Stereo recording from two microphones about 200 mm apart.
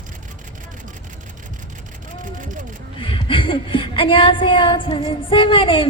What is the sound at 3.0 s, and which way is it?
A woman's voice, 25° left (ahead or behind).